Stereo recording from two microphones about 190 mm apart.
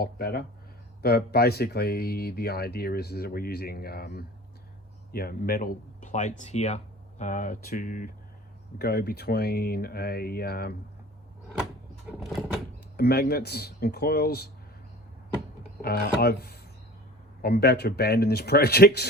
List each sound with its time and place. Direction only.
0.0 s speech: 55° left (ahead or behind)
12.2 s a sound: centre (ahead or behind)
13.0 s speech: 55° left (ahead or behind)
15.8 s speech: 55° left (ahead or behind)